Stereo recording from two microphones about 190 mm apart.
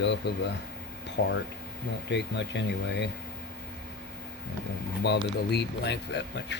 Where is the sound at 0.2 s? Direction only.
65° left (ahead or behind).